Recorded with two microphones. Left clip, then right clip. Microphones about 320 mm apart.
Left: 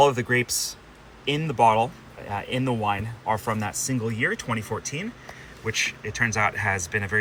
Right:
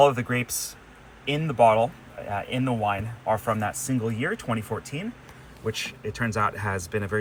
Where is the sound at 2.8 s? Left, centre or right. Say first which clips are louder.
Even; left.